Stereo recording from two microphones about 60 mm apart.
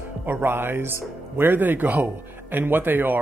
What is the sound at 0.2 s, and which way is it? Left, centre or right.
Speech, right.